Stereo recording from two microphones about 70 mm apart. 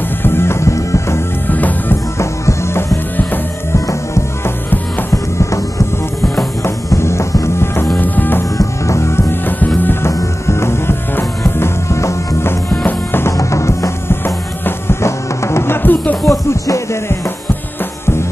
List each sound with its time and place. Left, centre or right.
0.2 s music: left
1.5 s music: left
2.1 s music: left
8.0 s music: left
8.5 s music: left
10.4 s music: left
12.6 s music: left
13.4 s music: left
14.2 s music: left
16.3 s music: left